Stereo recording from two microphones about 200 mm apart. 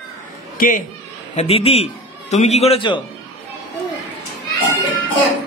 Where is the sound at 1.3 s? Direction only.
30° left (ahead or behind).